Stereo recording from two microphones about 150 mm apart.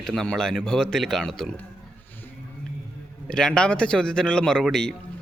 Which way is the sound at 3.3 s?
5° left (ahead or behind).